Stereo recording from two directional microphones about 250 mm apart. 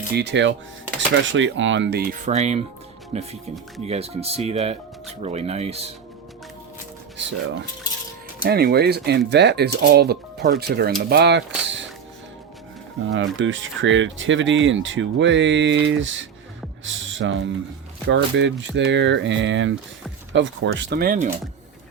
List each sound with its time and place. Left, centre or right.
0.1 s speech: right
7.2 s speech: right
13.1 s speech: right